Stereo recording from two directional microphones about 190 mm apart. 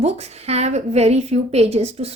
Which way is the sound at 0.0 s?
35° right (ahead or behind).